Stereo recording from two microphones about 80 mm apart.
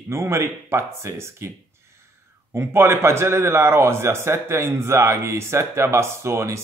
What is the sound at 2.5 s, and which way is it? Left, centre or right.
A man's voice, right.